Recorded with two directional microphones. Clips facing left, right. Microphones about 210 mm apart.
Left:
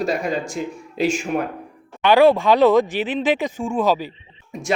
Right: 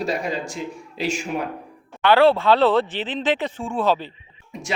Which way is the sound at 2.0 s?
15° left (ahead or behind).